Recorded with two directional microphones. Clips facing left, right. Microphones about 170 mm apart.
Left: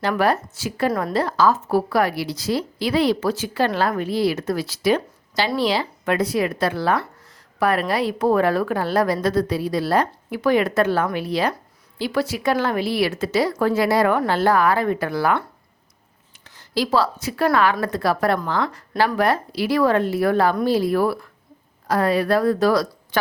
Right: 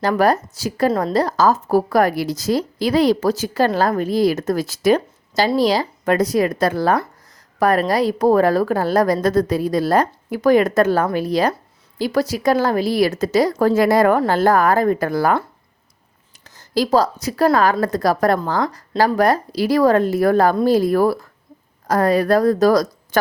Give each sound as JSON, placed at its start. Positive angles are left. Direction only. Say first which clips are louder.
{"t": 0.0, "sound": "a woman's voice", "louder": "right 3 dB", "side_deg": -40}
{"t": 0.9, "sound": "a woman's voice", "louder": "right 4 dB", "side_deg": -25}
{"t": 1.1, "sound": "a woman's voice", "louder": "right 2 dB", "side_deg": -40}
{"t": 16.4, "sound": "a woman's voice", "louder": "right 4 dB", "side_deg": -40}